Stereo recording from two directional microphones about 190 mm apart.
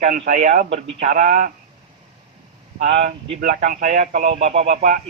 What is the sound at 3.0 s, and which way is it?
Speech, 45° right (ahead or behind).